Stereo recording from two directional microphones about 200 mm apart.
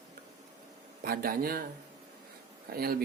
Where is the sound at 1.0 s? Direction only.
45° right (ahead or behind).